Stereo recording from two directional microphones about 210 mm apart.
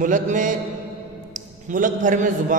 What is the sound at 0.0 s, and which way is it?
Speech, 35° right (ahead or behind).